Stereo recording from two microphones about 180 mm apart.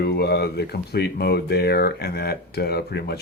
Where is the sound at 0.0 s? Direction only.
65° left (ahead or behind).